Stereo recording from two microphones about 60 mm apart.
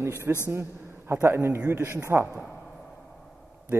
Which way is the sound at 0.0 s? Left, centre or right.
Right.